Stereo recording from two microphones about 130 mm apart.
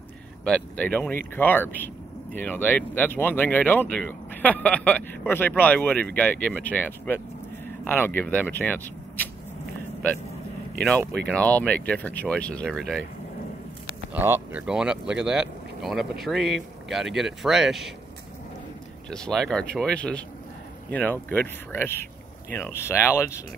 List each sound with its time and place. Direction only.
0.5 s speech: 10° left (ahead or behind)
11.2 s speech: 10° left (ahead or behind)
14.1 s speech: 15° right (ahead or behind)
19.0 s speech: 5° left (ahead or behind); by 23.4 s 20° left (ahead or behind)